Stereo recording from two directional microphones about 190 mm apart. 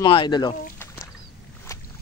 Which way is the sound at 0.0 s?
25° left (ahead or behind).